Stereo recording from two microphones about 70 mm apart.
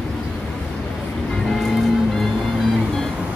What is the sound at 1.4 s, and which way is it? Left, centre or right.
Music, centre.